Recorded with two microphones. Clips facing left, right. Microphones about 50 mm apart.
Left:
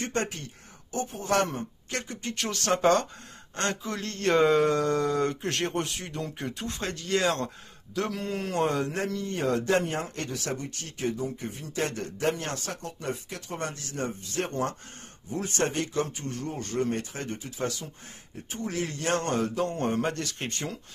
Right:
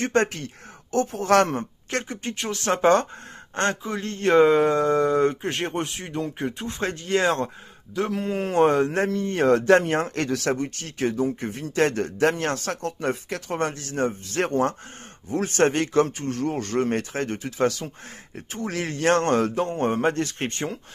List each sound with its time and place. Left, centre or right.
0.0 s speech: right
0.9 s speech: right
2.3 s speech: centre
2.7 s speech: right
3.8 s speech: centre
6.8 s speech: right
14.5 s speech: right
15.3 s speech: right
19.6 s speech: right